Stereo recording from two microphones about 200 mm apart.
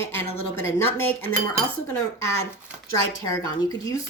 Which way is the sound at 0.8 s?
10° left (ahead or behind).